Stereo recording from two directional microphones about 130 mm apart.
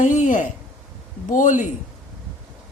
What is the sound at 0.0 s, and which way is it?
A woman's voice, 70° left (ahead or behind).